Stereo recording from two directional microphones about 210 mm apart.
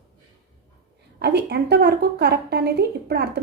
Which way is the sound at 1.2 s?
50° right (ahead or behind).